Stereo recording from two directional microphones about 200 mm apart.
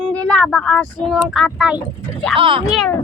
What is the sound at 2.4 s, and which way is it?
Speech, 25° right (ahead or behind).